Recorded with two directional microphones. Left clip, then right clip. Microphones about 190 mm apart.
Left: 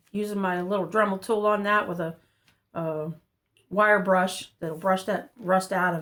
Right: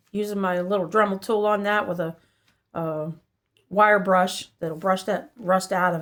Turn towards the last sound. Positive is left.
turn(degrees=-40)  # may be behind; listen again after turning